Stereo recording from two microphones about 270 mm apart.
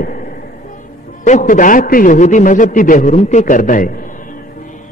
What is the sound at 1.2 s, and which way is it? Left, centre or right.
A man's voice, left.